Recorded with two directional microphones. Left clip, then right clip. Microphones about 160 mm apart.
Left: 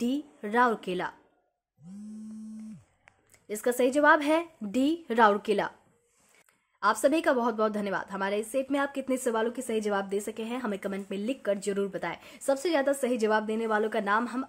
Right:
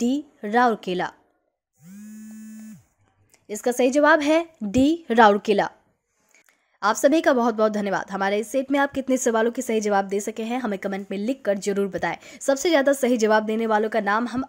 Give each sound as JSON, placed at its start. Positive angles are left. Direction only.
{"t": 0.0, "sound": "speech", "side_deg": -30}
{"t": 3.4, "sound": "speech", "side_deg": -30}
{"t": 6.8, "sound": "speech", "side_deg": -40}